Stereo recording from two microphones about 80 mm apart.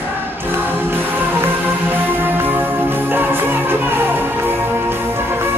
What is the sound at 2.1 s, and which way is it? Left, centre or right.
Music, right.